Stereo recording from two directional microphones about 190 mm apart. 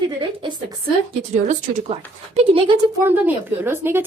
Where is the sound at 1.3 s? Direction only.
40° right (ahead or behind).